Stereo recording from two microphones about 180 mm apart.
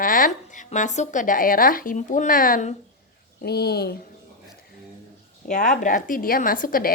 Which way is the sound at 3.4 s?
65° left (ahead or behind).